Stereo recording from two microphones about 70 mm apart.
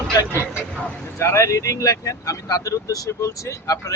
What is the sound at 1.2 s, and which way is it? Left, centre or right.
Speech, left.